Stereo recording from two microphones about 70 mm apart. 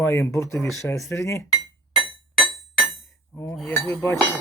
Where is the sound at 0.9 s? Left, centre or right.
Left.